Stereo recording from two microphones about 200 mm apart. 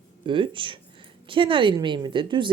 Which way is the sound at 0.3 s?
25° right (ahead or behind).